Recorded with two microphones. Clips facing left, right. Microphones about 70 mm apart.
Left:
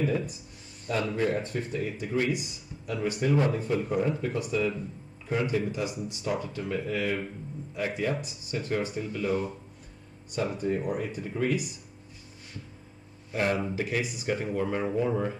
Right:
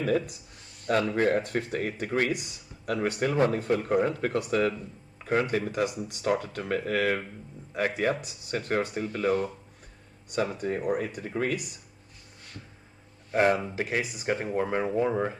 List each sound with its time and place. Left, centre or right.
0.8 s speech: right
13.3 s speech: right